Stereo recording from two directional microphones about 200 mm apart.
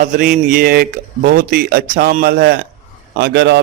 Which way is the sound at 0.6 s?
45° right (ahead or behind).